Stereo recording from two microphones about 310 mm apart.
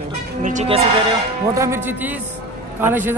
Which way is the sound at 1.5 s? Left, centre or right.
Centre.